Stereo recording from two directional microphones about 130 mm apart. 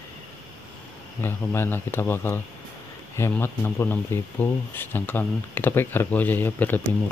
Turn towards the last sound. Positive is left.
turn(degrees=15)  # may be behind; listen again after turning